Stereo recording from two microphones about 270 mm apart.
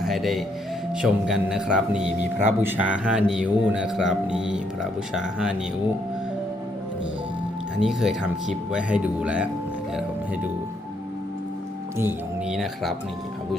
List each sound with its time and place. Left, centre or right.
0.0 s a man's voice: centre
7.8 s a man's voice: centre
11.9 s a man's voice: centre